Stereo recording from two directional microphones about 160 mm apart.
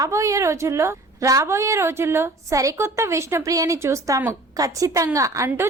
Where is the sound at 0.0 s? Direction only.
20° right (ahead or behind).